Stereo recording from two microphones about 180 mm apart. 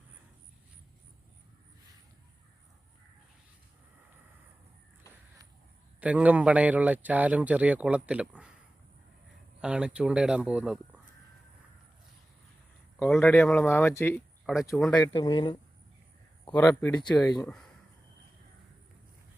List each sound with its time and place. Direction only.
6.0 s speech: 10° right (ahead or behind)
9.6 s speech: 5° right (ahead or behind)
13.0 s speech: 5° left (ahead or behind)
14.4 s speech: centre (ahead or behind)
14.9 s speech: 20° left (ahead or behind)
16.5 s speech: 10° left (ahead or behind)
17.2 s speech: 20° left (ahead or behind)